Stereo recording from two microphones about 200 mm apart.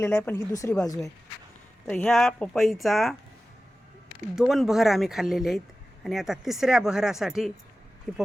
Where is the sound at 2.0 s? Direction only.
5° left (ahead or behind).